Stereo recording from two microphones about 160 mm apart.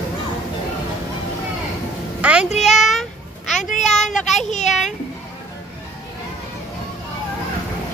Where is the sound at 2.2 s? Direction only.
5° right (ahead or behind).